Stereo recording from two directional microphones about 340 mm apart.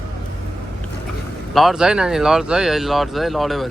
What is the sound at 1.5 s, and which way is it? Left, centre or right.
Speech, centre.